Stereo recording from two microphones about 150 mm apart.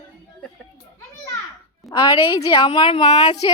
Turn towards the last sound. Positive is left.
turn(degrees=30)  # may be behind; listen again after turning